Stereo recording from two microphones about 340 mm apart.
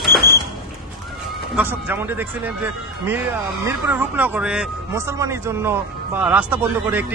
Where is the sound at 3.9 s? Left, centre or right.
Centre.